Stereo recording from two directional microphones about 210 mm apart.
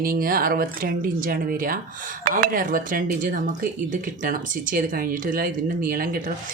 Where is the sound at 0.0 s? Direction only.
45° right (ahead or behind).